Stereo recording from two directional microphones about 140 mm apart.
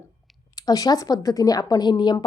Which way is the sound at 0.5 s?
25° left (ahead or behind).